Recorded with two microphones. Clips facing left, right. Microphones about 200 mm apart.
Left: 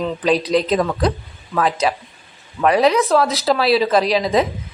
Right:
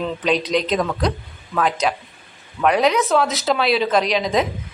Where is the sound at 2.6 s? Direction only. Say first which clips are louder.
Left 2 dB; centre (ahead or behind).